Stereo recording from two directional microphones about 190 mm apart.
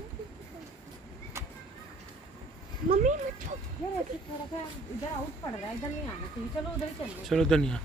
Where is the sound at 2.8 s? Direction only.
40° right (ahead or behind).